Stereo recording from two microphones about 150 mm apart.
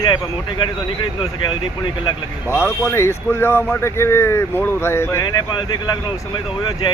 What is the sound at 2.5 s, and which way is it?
Speech, 15° left (ahead or behind).